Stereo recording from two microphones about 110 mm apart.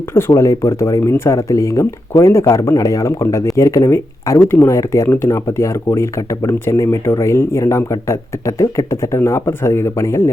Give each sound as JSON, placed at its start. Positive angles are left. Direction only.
{"t": 0.1, "sound": "speech", "side_deg": 25}